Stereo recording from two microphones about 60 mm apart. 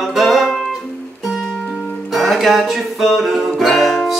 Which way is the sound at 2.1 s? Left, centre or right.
Centre.